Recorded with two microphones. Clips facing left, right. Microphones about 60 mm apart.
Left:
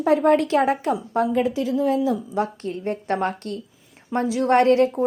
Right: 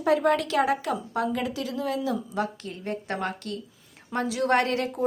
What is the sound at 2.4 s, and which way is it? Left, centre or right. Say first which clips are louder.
Speech: left 5 dB; left.